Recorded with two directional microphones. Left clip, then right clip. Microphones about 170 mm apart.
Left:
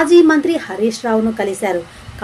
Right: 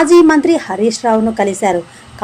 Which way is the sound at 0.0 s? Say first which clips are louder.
Right 2 dB; 25° right (ahead or behind).